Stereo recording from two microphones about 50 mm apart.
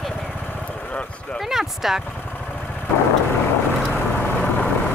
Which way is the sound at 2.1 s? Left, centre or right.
Left.